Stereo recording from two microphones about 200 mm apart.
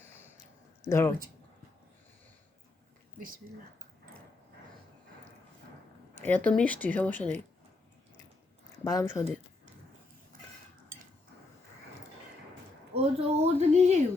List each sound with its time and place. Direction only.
0.9 s speech: 10° left (ahead or behind)
6.2 s speech: 10° left (ahead or behind)
8.8 s speech: 15° left (ahead or behind)
12.9 s speech: 30° right (ahead or behind)